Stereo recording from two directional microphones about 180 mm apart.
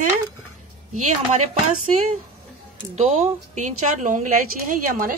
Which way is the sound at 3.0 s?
35° right (ahead or behind).